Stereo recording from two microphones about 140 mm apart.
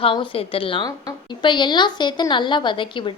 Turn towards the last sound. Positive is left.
turn(degrees=35)  # may be behind; listen again after turning